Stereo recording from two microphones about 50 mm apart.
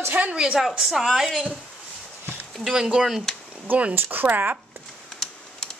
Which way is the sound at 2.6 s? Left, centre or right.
Centre.